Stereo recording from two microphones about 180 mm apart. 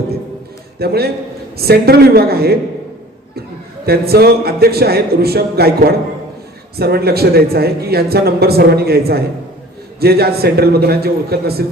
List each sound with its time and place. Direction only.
0.8 s speech: 60° right (ahead or behind)
3.8 s speech: 60° right (ahead or behind)